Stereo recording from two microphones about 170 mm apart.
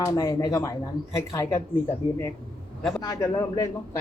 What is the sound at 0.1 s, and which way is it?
Speech, 15° left (ahead or behind).